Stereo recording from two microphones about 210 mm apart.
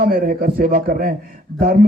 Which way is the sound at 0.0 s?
40° right (ahead or behind).